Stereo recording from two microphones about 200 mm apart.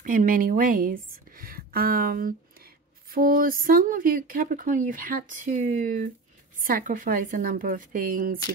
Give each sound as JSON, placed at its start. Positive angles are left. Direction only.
{"t": 0.0, "sound": "a woman's voice", "side_deg": -45}